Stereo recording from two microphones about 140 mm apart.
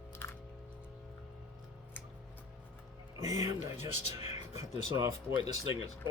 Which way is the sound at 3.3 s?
50° left (ahead or behind).